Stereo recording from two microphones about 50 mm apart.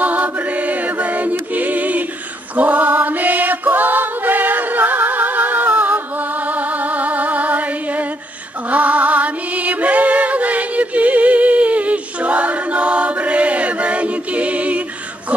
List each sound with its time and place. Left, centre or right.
0.0 s mantra: right
1.5 s choir: right
2.5 s mantra: right
8.6 s music: right